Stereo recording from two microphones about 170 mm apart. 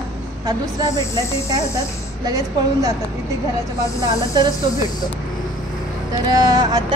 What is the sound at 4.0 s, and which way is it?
Speech, 25° right (ahead or behind).